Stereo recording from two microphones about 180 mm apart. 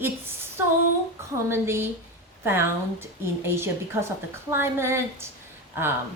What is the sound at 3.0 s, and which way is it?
A woman's voice, 15° right (ahead or behind).